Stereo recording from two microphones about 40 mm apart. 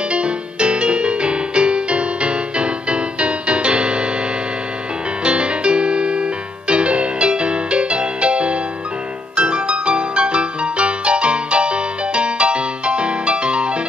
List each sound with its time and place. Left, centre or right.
0.1 s music: right
5.2 s music: right